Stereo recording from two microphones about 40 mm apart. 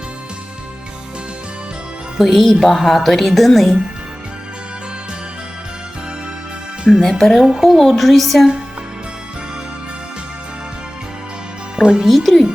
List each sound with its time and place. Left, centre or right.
2.1 s speech: centre
7.0 s speech: centre
11.8 s speech: right
12.0 s speech: centre